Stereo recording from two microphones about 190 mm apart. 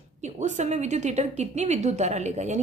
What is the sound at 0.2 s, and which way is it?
Speech, 40° right (ahead or behind).